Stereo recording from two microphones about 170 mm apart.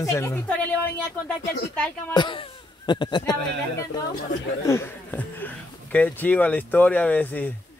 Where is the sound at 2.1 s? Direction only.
30° left (ahead or behind).